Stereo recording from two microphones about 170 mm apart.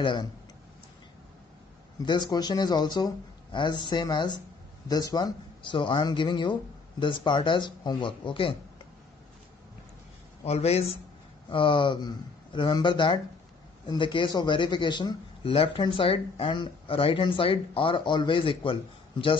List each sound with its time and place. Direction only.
0.0 s speech: 25° left (ahead or behind)
2.0 s speech: 25° left (ahead or behind)
10.4 s speech: 40° left (ahead or behind)